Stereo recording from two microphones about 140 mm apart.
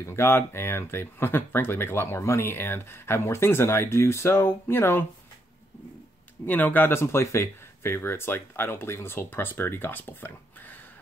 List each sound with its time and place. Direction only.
0.0 s speech: 15° left (ahead or behind)
6.4 s speech: 10° left (ahead or behind)